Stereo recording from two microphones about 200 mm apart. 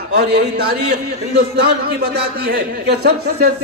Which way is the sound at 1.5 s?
55° right (ahead or behind).